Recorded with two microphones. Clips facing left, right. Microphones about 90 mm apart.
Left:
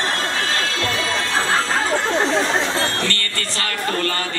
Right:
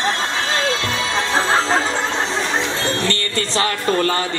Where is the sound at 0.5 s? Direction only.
20° right (ahead or behind).